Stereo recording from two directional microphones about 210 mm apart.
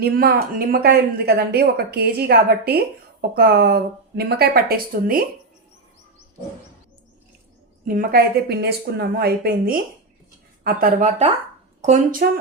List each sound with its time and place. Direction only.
0.0 s speech: 45° right (ahead or behind)
7.9 s speech: 45° right (ahead or behind)